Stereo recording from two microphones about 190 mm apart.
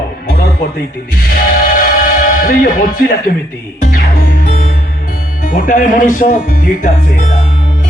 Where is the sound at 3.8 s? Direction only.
50° left (ahead or behind).